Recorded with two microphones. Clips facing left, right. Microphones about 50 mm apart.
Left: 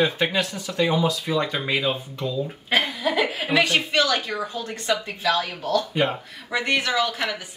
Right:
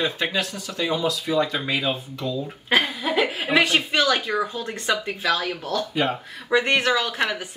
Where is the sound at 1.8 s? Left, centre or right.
Centre.